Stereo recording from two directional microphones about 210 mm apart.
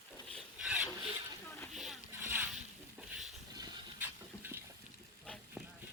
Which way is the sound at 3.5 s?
10° right (ahead or behind).